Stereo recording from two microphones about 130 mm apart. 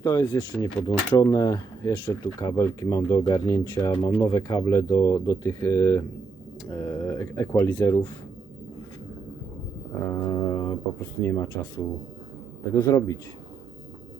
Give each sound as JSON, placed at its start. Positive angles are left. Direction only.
{"t": 0.0, "sound": "speech", "side_deg": 30}
{"t": 0.5, "sound": "speech", "side_deg": 10}
{"t": 0.9, "sound": "speech", "side_deg": 30}
{"t": 10.1, "sound": "speech", "side_deg": 25}
{"t": 12.7, "sound": "speech", "side_deg": 25}